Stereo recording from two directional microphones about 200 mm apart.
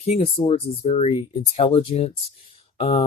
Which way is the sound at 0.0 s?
30° left (ahead or behind).